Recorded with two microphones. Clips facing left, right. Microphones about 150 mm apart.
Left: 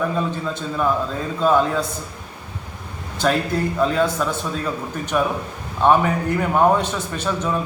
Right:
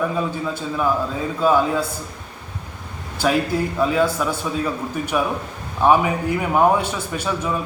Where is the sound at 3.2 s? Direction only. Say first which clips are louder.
Even; 10° right (ahead or behind).